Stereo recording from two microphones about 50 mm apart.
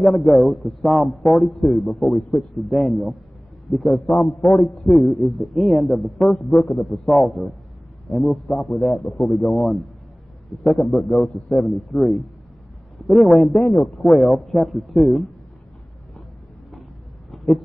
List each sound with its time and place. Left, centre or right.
0.0 s a man's voice: centre
1.6 s a man's voice: centre
2.3 s a man's voice: centre